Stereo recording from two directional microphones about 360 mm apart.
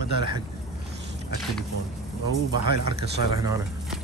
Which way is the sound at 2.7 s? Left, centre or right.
Right.